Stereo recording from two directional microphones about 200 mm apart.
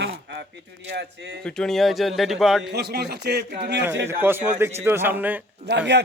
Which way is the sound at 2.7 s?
55° right (ahead or behind).